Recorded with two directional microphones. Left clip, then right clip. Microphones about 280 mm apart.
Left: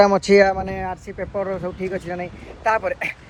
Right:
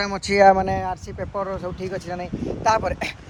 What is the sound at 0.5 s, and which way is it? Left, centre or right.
Speech, right.